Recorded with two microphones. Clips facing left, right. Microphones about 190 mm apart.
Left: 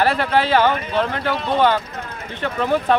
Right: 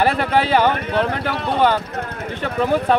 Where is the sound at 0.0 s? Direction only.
10° right (ahead or behind).